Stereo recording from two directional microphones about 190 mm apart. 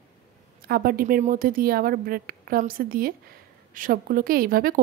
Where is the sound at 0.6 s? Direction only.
50° right (ahead or behind).